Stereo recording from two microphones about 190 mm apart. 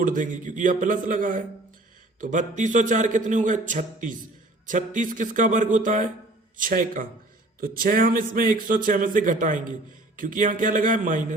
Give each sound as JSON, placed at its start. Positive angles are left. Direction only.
{"t": 0.0, "sound": "a man's voice", "side_deg": -45}